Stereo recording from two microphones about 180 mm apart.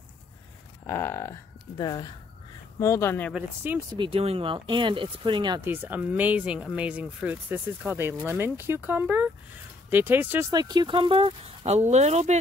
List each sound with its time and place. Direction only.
0.8 s speech: 15° left (ahead or behind)
3.3 s speech: 10° right (ahead or behind)
4.0 s speech: 30° right (ahead or behind)
5.6 s speech: 10° right (ahead or behind); by 12.4 s 40° right (ahead or behind)